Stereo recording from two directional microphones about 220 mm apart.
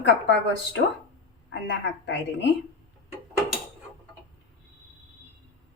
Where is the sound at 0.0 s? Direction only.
50° left (ahead or behind).